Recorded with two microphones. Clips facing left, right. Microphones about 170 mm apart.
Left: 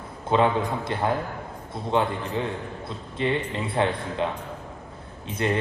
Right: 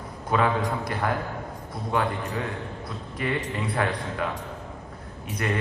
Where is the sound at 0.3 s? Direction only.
25° left (ahead or behind).